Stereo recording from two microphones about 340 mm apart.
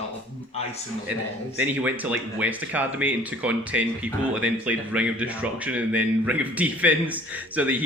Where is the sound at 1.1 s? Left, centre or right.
Centre.